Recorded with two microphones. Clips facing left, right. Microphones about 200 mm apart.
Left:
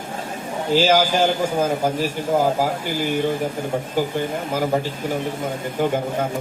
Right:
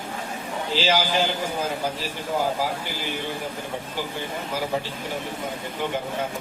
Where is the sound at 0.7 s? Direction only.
45° left (ahead or behind).